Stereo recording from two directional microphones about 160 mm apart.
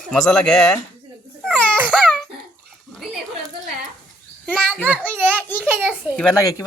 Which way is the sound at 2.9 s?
Centre (ahead or behind).